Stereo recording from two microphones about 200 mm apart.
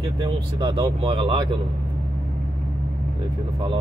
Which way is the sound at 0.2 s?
20° right (ahead or behind).